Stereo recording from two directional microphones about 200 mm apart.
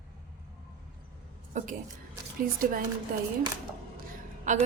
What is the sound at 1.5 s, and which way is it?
A woman's voice, 35° right (ahead or behind).